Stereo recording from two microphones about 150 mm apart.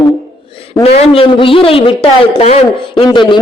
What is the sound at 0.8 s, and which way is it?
A man's voice, 40° left (ahead or behind).